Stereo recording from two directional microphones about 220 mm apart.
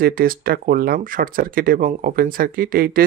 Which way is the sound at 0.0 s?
40° right (ahead or behind).